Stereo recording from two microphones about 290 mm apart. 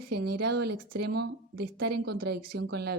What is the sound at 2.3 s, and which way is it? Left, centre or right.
Speech, right.